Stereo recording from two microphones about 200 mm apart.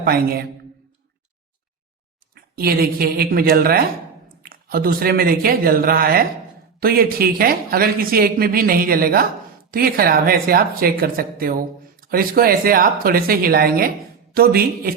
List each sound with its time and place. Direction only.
0.0 s speech: 50° right (ahead or behind)
2.3 s speech: 50° right (ahead or behind)